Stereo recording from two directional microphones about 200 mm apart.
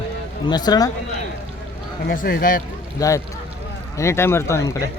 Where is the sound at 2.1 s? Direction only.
50° left (ahead or behind).